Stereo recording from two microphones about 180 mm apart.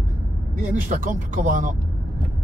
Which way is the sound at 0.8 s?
45° right (ahead or behind).